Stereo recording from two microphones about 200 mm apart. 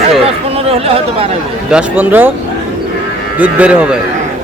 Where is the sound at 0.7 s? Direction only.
30° right (ahead or behind).